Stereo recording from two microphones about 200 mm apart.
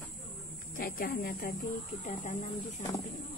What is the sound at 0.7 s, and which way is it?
Speech, 45° left (ahead or behind).